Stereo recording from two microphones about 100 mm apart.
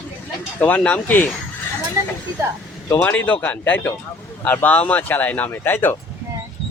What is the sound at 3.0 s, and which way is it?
Speech, 15° left (ahead or behind).